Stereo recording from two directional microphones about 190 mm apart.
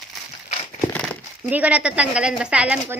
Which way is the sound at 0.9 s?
5° left (ahead or behind).